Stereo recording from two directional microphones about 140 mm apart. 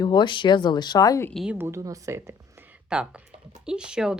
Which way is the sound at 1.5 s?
20° right (ahead or behind).